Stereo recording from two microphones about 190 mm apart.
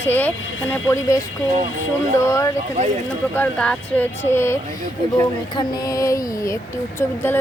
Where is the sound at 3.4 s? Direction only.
5° left (ahead or behind).